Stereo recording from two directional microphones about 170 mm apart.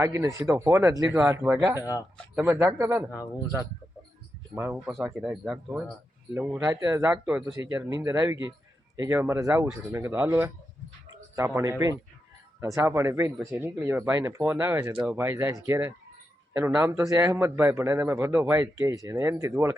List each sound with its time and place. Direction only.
0.0 s speech: 15° right (ahead or behind)
1.8 s speech: 20° left (ahead or behind)
2.3 s speech: 10° right (ahead or behind)
4.5 s speech: 15° right (ahead or behind)
4.9 s speech: centre (ahead or behind); by 19.7 s 15° right (ahead or behind)